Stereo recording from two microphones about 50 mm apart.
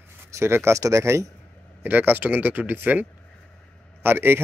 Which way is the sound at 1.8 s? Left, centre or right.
Right.